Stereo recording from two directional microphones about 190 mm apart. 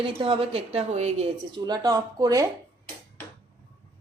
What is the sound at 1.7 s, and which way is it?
Speech, 20° right (ahead or behind).